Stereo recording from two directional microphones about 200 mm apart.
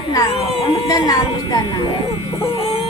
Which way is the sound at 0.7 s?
20° left (ahead or behind).